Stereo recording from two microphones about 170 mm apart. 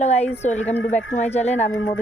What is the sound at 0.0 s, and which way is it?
Speech, 40° left (ahead or behind).